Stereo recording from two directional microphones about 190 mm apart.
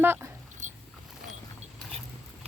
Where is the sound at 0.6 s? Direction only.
40° right (ahead or behind).